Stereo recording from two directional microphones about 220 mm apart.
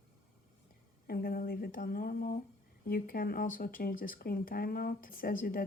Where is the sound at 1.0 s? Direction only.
45° left (ahead or behind).